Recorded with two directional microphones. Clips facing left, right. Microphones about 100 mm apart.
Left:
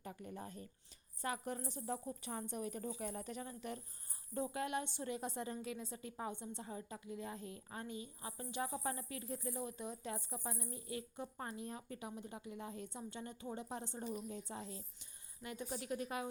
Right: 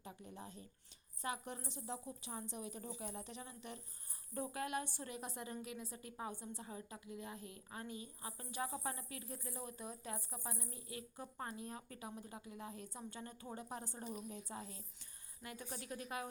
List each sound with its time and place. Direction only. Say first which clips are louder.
0.0 s a woman's voice: left 4 dB; 50° left (ahead or behind)
4.4 s speech: left 2 dB; 25° left (ahead or behind)